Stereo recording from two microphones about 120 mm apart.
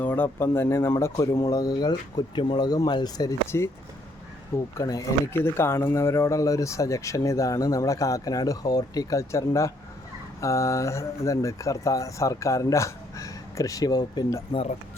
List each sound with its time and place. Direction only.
0.0 s speech: 15° left (ahead or behind); by 3.3 s 35° left (ahead or behind)
3.4 s speech: 20° left (ahead or behind)
4.8 s speech: 30° left (ahead or behind)